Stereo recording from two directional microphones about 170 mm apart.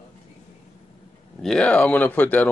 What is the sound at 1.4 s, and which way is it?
Speech, 5° left (ahead or behind).